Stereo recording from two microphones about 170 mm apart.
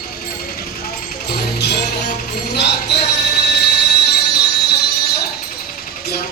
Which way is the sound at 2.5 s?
80° left.